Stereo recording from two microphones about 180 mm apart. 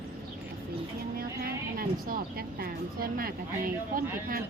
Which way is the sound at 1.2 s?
55° right (ahead or behind).